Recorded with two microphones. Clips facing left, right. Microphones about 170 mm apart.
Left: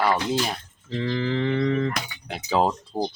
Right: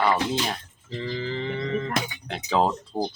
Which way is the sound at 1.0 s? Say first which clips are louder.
Left 5 dB; 65° left (ahead or behind).